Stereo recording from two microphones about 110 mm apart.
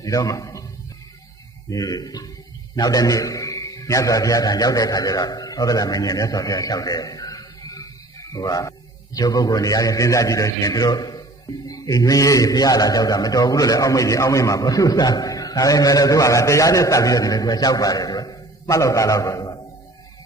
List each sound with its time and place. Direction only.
0.0 s a man's voice: 30° left (ahead or behind)
1.7 s a man's voice: 35° left (ahead or behind)